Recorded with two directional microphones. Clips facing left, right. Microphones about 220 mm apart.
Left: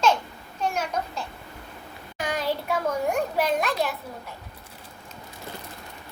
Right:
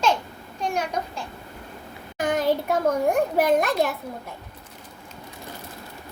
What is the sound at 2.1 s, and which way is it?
Child singing, 50° right (ahead or behind).